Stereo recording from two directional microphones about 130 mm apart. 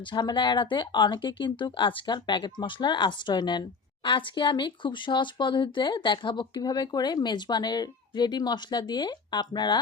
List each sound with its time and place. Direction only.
0.0 s speech: 35° left (ahead or behind)